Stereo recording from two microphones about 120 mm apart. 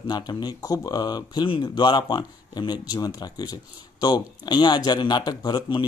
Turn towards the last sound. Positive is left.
turn(degrees=40)  # may be behind; listen again after turning